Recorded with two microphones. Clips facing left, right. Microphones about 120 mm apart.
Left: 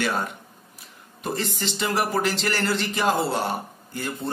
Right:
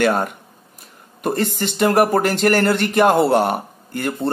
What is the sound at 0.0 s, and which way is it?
Speech, 55° right (ahead or behind).